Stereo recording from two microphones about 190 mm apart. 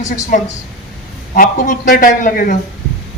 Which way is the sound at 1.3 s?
45° left (ahead or behind).